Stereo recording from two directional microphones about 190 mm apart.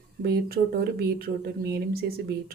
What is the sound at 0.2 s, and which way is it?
Speech, 55° right (ahead or behind).